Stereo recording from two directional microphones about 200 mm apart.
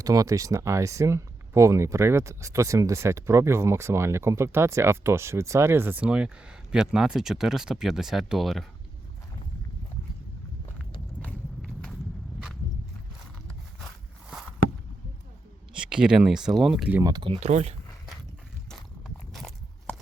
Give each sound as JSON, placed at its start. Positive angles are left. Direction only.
{"t": 0.0, "sound": "speech", "side_deg": -15}
{"t": 11.3, "sound": "walk", "side_deg": 0}
{"t": 15.7, "sound": "speech", "side_deg": -5}
{"t": 17.0, "sound": "speech", "side_deg": -20}
{"t": 18.7, "sound": "walk", "side_deg": 0}